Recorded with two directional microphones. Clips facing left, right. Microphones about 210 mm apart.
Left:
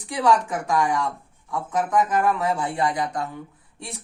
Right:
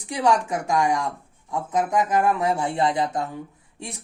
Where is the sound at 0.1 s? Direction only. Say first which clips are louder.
Left 1 dB; 15° right (ahead or behind).